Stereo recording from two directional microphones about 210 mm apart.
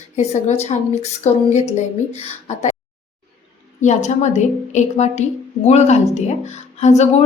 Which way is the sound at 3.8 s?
35° left (ahead or behind).